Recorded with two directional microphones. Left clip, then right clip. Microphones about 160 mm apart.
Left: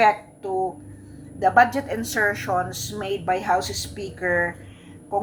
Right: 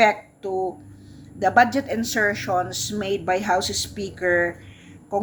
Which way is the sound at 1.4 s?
30° right (ahead or behind).